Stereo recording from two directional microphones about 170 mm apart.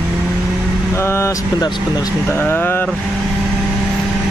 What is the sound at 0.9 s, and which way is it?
Speech, 15° left (ahead or behind).